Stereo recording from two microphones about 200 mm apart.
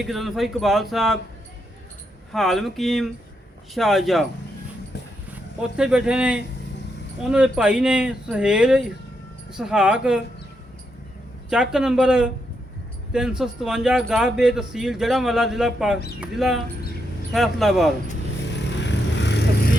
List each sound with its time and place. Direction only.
0.0 s speech: centre (ahead or behind)
2.3 s speech: centre (ahead or behind)
5.3 s speech: 5° right (ahead or behind)
11.4 s speech: 5° right (ahead or behind)
18.5 s vehicle: 60° left (ahead or behind)